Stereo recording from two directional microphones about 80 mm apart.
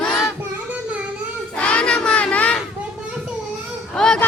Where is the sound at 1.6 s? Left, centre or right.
Centre.